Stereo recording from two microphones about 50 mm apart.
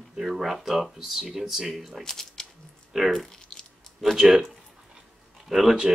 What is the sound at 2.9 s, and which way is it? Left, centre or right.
Speech, centre.